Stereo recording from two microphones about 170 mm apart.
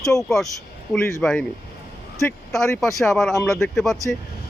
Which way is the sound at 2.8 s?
Centre (ahead or behind).